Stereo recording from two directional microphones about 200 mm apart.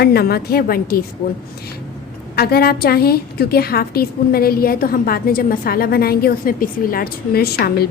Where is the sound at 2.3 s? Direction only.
50° left (ahead or behind).